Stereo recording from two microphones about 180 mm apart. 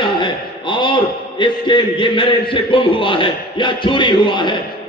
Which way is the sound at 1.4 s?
25° left (ahead or behind).